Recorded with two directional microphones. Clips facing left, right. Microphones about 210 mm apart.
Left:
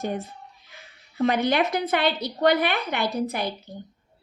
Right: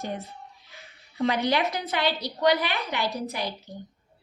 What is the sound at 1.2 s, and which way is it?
A woman's voice, 55° left (ahead or behind).